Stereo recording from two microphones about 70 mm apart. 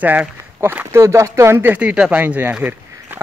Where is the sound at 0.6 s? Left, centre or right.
Right.